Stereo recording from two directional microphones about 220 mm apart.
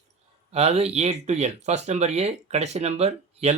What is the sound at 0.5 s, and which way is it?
Speech, 30° right (ahead or behind).